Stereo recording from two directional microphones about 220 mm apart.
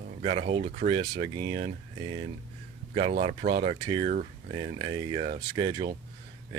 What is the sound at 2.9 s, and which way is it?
Speech, 30° right (ahead or behind).